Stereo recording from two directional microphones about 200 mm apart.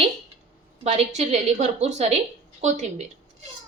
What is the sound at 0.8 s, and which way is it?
A woman's voice, 30° right (ahead or behind).